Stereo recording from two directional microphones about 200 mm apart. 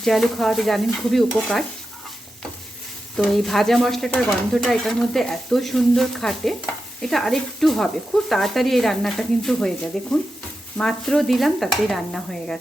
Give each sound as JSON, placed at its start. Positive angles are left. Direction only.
{"t": 0.0, "sound": "speech", "side_deg": 0}
{"t": 3.2, "sound": "speech", "side_deg": 0}